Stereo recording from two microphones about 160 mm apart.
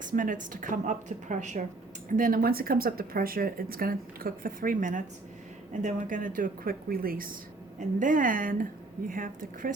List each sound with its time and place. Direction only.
0.0 s a woman's voice: 55° right (ahead or behind)